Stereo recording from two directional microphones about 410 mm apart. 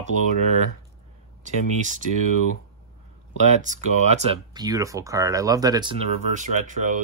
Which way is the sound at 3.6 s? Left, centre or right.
Centre.